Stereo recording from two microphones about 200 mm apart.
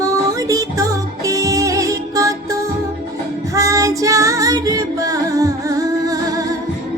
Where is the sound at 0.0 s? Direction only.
15° right (ahead or behind).